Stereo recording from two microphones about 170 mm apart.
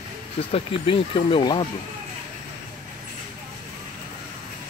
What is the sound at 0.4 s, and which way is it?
Speech, 35° left (ahead or behind).